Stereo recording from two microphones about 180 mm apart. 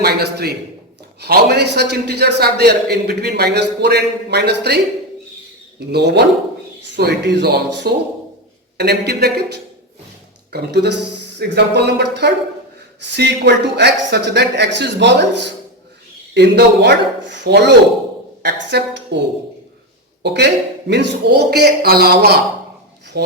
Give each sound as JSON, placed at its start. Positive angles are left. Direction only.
{"t": 0.0, "sound": "a man's voice", "side_deg": -65}
{"t": 5.8, "sound": "a woman's voice", "side_deg": -70}
{"t": 10.5, "sound": "a woman's voice", "side_deg": -70}
{"t": 20.2, "sound": "a man's voice", "side_deg": -70}
{"t": 23.1, "sound": "rub", "side_deg": -65}